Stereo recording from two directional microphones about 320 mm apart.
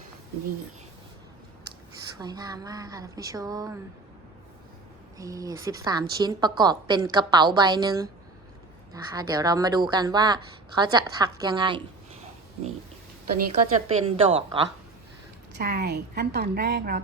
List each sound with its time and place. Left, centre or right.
2.1 s a woman's voice: centre
5.1 s a woman's voice: centre
13.5 s a woman's voice: centre
15.5 s a woman's voice: right